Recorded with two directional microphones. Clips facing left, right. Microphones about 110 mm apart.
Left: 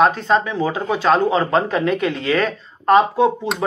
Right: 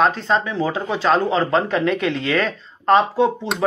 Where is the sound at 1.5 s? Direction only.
30° left (ahead or behind).